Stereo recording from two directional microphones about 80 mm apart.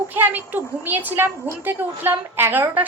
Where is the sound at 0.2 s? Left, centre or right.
Right.